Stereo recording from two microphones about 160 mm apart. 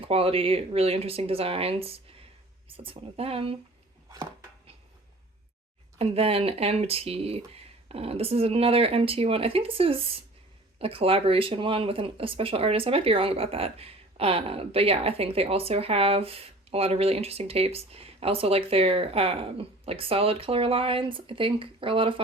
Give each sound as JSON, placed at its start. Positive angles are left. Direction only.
{"t": 0.0, "sound": "speech", "side_deg": -35}
{"t": 6.0, "sound": "speech", "side_deg": -35}